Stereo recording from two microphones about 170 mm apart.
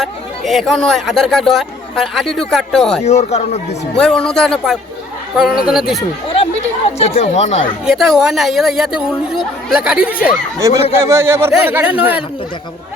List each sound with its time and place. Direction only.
0.0 s speech: centre (ahead or behind)
3.0 s speech: 40° left (ahead or behind)
3.9 s speech: 5° left (ahead or behind)
6.2 s speech: 35° left (ahead or behind)
7.9 s speech: centre (ahead or behind)